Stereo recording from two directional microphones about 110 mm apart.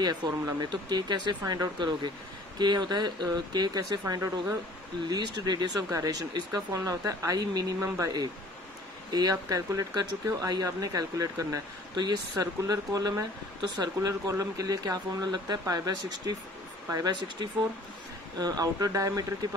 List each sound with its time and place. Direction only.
0.0 s speech: 40° right (ahead or behind)
4.1 s speech: 30° right (ahead or behind)
5.0 s speech: 40° right (ahead or behind)
9.1 s speech: 35° right (ahead or behind)